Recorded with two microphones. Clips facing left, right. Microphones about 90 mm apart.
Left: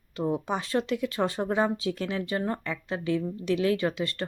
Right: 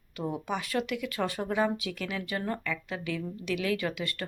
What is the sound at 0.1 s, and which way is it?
Speech, 30° left (ahead or behind).